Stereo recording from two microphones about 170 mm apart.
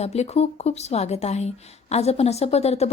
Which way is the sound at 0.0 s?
40° left (ahead or behind).